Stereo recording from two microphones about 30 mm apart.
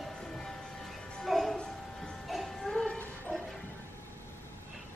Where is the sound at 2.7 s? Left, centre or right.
Left.